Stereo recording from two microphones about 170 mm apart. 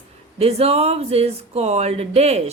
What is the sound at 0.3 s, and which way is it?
A woman's voice, 35° right (ahead or behind).